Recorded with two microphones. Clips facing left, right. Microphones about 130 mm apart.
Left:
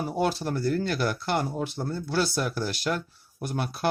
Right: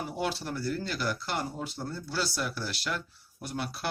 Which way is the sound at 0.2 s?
45° left (ahead or behind).